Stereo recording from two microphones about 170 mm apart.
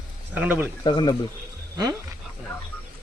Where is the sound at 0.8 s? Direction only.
25° left (ahead or behind).